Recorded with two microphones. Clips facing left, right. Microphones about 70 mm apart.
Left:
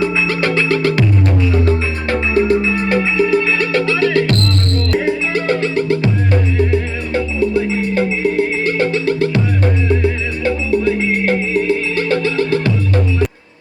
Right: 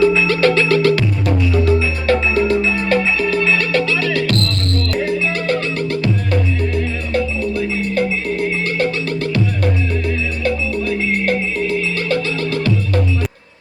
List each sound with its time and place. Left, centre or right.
0.0 s music: left